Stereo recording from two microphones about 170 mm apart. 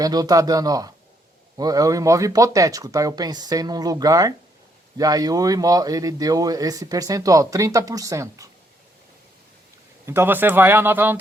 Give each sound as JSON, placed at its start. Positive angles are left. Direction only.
{"t": 0.0, "sound": "speech", "side_deg": -20}
{"t": 10.1, "sound": "speech", "side_deg": -15}